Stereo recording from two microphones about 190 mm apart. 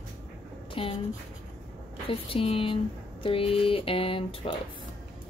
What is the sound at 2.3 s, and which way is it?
Speech, 30° left (ahead or behind).